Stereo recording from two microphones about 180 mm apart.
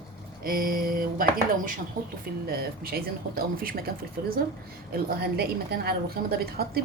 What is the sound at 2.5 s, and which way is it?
Speech, 55° right (ahead or behind).